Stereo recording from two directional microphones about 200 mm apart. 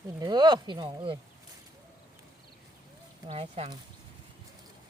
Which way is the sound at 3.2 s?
30° right (ahead or behind).